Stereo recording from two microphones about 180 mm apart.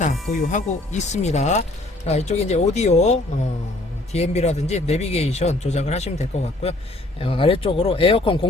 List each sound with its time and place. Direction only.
0.0 s a man's voice: 45° left (ahead or behind)